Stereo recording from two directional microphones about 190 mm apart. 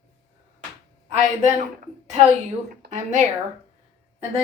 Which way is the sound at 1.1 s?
35° right (ahead or behind).